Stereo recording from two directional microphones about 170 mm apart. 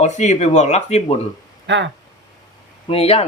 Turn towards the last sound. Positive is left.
turn(degrees=35)  # may be behind; listen again after turning